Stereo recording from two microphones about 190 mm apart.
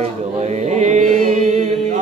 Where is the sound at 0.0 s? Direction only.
35° right (ahead or behind).